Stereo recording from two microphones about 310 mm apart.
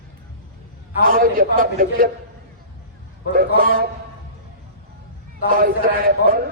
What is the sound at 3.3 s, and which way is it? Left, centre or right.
Speech, right.